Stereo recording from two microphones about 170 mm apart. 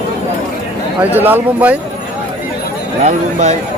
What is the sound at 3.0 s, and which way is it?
Speech, 45° right (ahead or behind).